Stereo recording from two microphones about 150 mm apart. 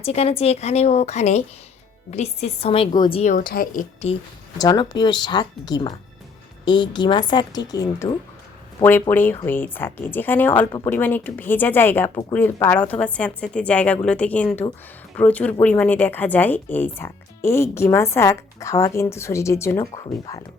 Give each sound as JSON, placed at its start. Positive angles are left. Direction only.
{"t": 0.0, "sound": "a woman's voice", "side_deg": 45}
{"t": 3.3, "sound": "speech", "side_deg": 85}
{"t": 4.5, "sound": "a woman's voice", "side_deg": 25}